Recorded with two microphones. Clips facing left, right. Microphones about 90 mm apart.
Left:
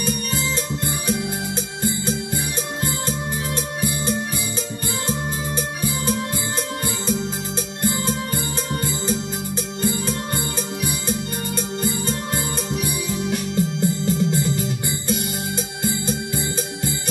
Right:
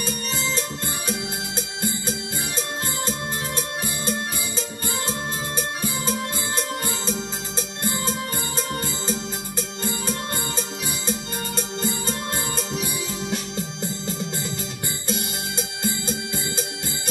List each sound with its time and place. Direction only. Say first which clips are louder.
12.8 s music: left 4 dB; 25° right (ahead or behind)